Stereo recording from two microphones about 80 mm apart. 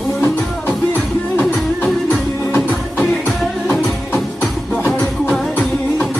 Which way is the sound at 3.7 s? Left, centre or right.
Centre.